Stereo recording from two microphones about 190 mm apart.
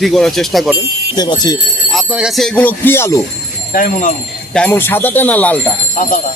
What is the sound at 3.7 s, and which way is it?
Speech, 45° left (ahead or behind).